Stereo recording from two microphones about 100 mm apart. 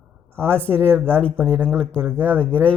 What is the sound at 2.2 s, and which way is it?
Speech, 10° left (ahead or behind).